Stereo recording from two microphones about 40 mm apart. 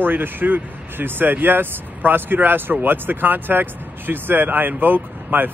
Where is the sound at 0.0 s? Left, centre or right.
Right.